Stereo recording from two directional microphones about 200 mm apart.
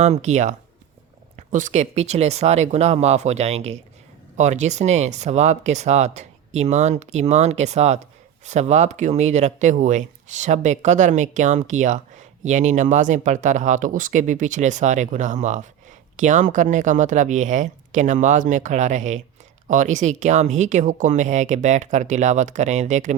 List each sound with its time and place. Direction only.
0.0 s speech: 35° right (ahead or behind)